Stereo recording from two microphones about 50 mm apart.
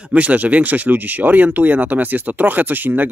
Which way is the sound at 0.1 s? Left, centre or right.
Right.